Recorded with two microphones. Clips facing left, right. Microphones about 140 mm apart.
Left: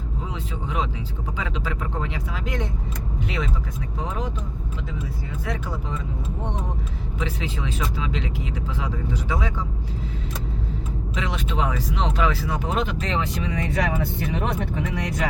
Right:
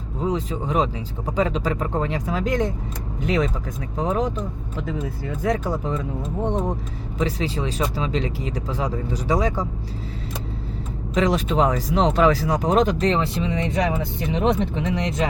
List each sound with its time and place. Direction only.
0.3 s speech: 40° right (ahead or behind)
5.4 s speech: 45° right (ahead or behind)
7.2 s speech: 35° right (ahead or behind)
11.1 s speech: 40° right (ahead or behind); by 15.3 s 25° right (ahead or behind)